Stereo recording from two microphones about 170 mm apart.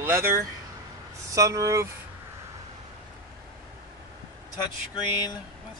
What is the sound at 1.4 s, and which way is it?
Speech, 20° right (ahead or behind).